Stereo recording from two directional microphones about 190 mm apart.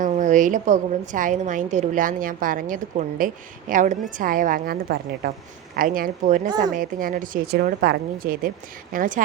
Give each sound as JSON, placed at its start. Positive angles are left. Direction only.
{"t": 0.0, "sound": "a woman's voice", "side_deg": -40}